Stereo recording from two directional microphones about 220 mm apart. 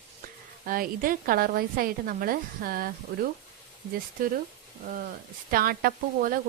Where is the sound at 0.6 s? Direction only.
40° right (ahead or behind).